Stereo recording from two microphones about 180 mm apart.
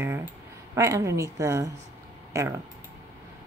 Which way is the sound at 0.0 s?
10° right (ahead or behind).